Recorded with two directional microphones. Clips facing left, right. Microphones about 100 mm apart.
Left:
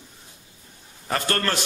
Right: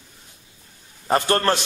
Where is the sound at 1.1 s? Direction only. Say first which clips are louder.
Right 6 dB; 25° right (ahead or behind).